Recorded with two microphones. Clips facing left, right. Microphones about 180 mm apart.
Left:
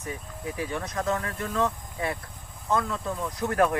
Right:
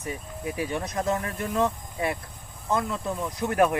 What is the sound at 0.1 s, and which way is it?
Speech, 15° right (ahead or behind).